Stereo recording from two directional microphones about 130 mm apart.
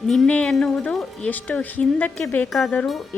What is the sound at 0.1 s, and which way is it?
Speech, 5° left (ahead or behind).